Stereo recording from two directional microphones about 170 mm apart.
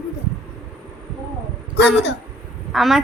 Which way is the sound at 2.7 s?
Centre (ahead or behind).